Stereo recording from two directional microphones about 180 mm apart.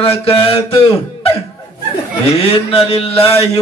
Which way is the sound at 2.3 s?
30° left (ahead or behind).